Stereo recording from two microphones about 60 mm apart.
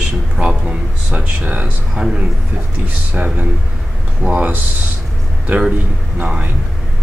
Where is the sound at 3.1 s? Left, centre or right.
Right.